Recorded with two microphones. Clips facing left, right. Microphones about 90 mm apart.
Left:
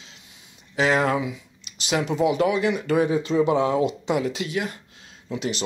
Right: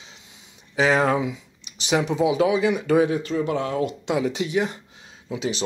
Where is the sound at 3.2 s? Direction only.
20° left (ahead or behind).